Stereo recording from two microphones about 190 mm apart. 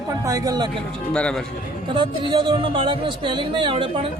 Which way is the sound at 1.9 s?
25° right (ahead or behind).